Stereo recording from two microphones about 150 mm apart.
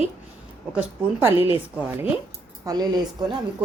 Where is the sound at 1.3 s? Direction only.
35° left (ahead or behind).